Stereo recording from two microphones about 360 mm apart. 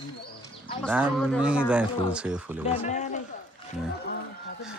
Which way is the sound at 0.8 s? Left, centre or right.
Centre.